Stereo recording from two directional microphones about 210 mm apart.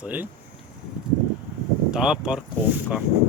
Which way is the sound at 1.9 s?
5° right (ahead or behind).